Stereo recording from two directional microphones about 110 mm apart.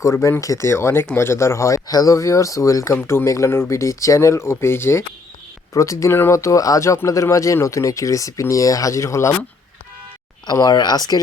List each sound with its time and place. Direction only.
0.0 s speech: 25° left (ahead or behind)
10.4 s speech: 35° left (ahead or behind)